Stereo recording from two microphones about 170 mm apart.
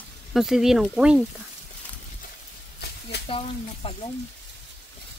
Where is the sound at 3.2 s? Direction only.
35° left (ahead or behind).